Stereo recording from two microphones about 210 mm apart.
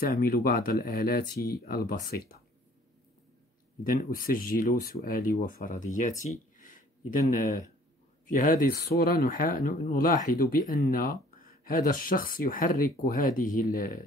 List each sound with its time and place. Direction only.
0.0 s speech: 45° left (ahead or behind)
3.8 s speech: 40° left (ahead or behind)
8.3 s speech: 40° left (ahead or behind)